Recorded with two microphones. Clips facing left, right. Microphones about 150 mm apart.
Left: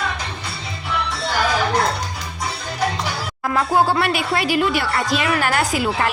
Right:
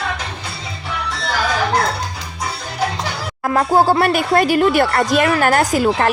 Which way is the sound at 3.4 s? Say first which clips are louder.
Right 4 dB; 40° right (ahead or behind).